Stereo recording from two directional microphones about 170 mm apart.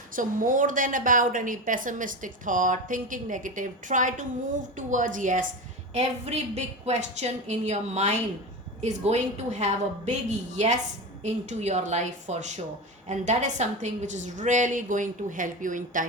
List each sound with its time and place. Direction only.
0.2 s a woman's voice: 50° right (ahead or behind)
5.9 s a woman's voice: 40° right (ahead or behind)